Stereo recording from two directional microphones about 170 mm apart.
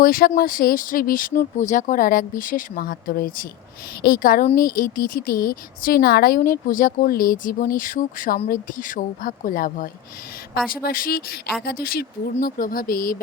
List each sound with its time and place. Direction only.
0.0 s speech: 60° left (ahead or behind)